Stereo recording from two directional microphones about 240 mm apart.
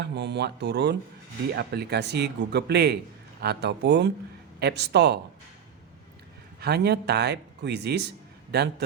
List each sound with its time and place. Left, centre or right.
0.0 s speech: right
6.6 s a man's voice: right